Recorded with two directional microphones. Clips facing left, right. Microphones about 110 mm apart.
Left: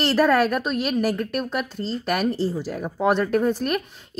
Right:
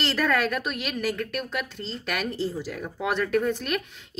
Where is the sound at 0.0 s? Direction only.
35° left (ahead or behind).